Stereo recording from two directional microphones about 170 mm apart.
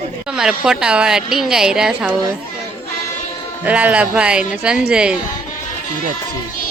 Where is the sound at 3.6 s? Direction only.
10° right (ahead or behind).